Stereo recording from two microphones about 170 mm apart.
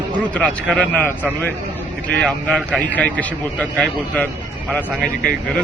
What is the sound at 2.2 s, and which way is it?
A man's voice, 5° left (ahead or behind).